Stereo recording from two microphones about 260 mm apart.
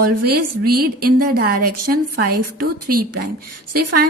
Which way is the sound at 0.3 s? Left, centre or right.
Right.